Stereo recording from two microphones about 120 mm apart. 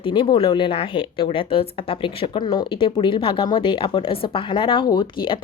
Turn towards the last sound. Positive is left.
turn(degrees=45)  # may be behind; listen again after turning